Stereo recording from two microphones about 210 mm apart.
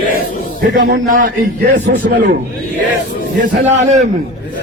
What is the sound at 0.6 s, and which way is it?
A man's voice, 45° right (ahead or behind).